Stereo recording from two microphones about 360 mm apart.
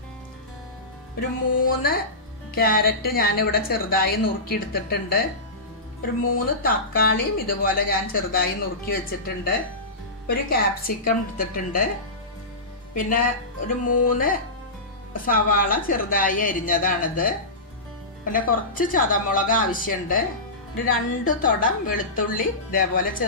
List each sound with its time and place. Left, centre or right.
1.6 s speech: left
6.3 s speech: left
12.9 s speech: left